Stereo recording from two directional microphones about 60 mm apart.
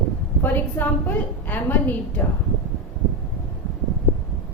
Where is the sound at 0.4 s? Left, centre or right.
Left.